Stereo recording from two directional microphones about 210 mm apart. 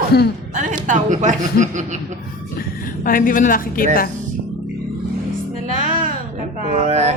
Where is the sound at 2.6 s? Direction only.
45° left (ahead or behind).